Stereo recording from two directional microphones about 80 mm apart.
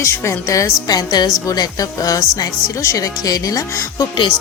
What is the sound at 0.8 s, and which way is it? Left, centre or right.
A woman's voice, left.